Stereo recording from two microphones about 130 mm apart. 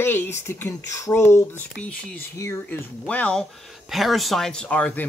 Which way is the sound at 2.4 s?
25° left (ahead or behind).